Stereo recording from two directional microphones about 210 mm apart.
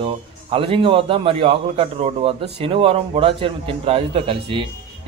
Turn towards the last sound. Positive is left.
turn(degrees=-25)  # may be behind; listen again after turning